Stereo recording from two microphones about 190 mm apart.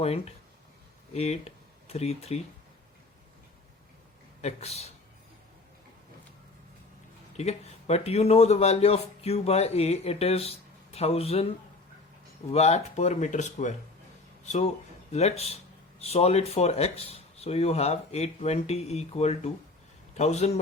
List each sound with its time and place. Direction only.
0.0 s speech: 30° left (ahead or behind)
4.4 s a man's voice: 35° left (ahead or behind)
7.3 s speech: 35° left (ahead or behind)
12.5 s speech: 35° left (ahead or behind)